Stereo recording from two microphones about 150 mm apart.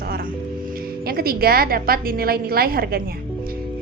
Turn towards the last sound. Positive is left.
turn(degrees=-85)